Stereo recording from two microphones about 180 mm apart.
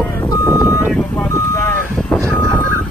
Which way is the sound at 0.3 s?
15° left (ahead or behind).